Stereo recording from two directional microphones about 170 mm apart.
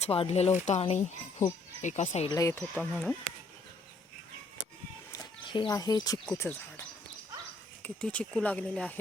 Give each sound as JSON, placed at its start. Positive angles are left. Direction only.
{"t": 0.0, "sound": "speech", "side_deg": 35}
{"t": 2.3, "sound": "speech", "side_deg": 20}
{"t": 2.6, "sound": "speech", "side_deg": 5}
{"t": 5.1, "sound": "speech", "side_deg": 25}